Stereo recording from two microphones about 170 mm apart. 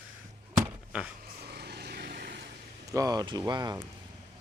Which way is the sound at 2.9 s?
20° right (ahead or behind).